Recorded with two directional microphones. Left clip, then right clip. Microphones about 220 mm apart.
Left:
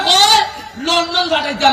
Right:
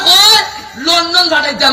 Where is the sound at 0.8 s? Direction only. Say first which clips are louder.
Right 5 dB; 55° right (ahead or behind).